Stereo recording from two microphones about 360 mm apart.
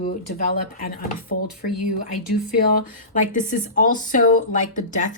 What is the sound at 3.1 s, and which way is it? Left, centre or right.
Speech, left.